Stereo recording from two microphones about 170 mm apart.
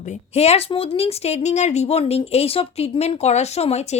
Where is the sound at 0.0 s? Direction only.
40° left (ahead or behind).